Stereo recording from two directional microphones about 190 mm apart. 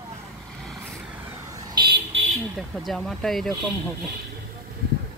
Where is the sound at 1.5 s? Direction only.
25° right (ahead or behind).